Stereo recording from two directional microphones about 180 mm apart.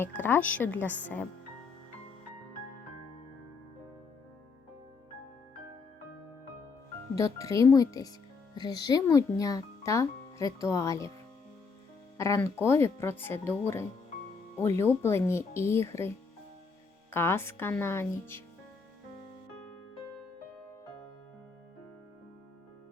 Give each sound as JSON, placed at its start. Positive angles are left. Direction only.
{"t": 0.0, "sound": "a child's voice", "side_deg": 10}
{"t": 7.2, "sound": "a child's voice", "side_deg": 20}
{"t": 12.1, "sound": "a child's voice", "side_deg": 15}